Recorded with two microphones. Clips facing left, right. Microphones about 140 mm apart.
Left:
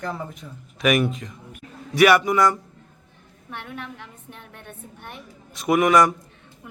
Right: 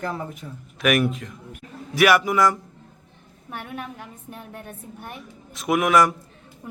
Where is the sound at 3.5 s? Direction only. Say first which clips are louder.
Right 2 dB; 45° right (ahead or behind).